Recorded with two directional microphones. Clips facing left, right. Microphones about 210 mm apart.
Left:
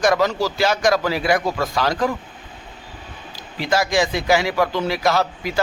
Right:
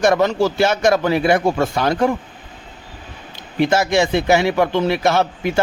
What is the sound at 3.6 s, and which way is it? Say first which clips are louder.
Speech: right 2 dB; 25° right (ahead or behind).